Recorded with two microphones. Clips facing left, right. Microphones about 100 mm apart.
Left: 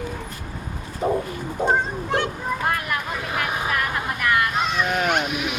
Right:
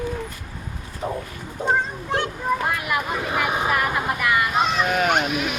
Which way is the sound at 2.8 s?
10° right (ahead or behind).